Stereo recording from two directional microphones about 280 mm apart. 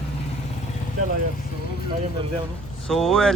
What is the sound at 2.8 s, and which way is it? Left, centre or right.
Speech, centre.